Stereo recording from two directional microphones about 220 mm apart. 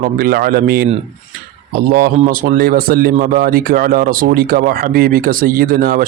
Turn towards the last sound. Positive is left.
turn(degrees=-40)  # may be behind; listen again after turning